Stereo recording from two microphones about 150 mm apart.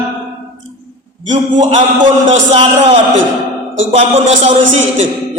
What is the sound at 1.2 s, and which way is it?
A man's voice, 55° right (ahead or behind).